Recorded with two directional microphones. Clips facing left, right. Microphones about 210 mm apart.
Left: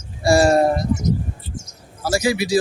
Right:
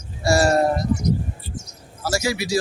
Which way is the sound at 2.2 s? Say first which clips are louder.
Left 5 dB; 30° left (ahead or behind).